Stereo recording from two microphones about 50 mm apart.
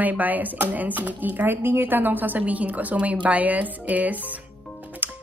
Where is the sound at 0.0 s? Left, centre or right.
Right.